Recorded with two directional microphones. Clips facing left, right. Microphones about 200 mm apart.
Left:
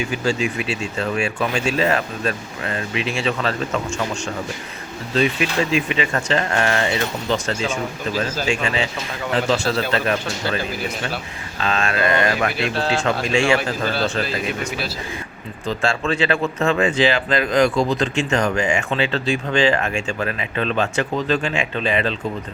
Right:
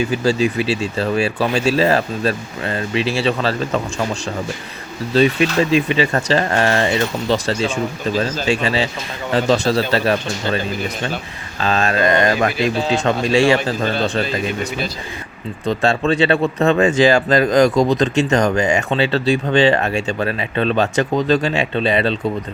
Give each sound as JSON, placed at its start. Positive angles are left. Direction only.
{"t": 0.1, "sound": "speech", "side_deg": -35}
{"t": 5.1, "sound": "speech", "side_deg": -35}
{"t": 15.8, "sound": "speech", "side_deg": -35}